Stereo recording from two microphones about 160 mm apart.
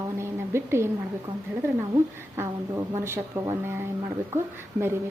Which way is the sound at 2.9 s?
15° right (ahead or behind).